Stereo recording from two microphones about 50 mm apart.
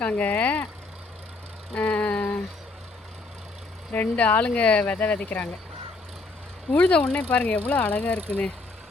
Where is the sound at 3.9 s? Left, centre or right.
Left.